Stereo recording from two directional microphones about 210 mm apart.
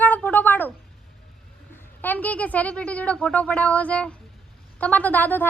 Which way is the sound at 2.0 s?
10° left (ahead or behind).